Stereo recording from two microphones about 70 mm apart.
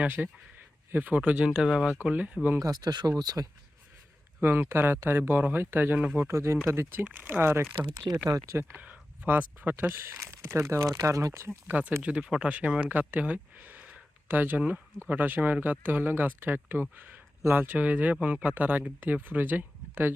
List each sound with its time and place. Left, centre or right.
0.0 s speech: right; by 2.0 s centre
2.1 s speech: right
2.6 s speech: right
3.1 s speech: right
4.4 s speech: right
7.0 s speech: right
8.2 s speech: right
8.8 s speech: right
9.9 s speech: right
10.8 s speech: right
11.7 s speech: right